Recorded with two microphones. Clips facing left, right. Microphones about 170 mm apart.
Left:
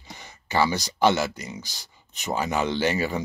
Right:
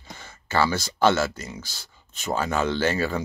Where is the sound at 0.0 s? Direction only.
15° left (ahead or behind).